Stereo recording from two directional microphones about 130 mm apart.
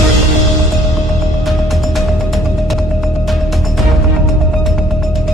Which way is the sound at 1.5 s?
Centre (ahead or behind).